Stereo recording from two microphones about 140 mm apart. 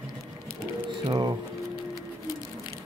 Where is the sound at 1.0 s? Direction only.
30° right (ahead or behind).